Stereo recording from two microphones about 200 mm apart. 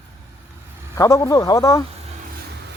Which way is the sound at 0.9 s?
15° left (ahead or behind).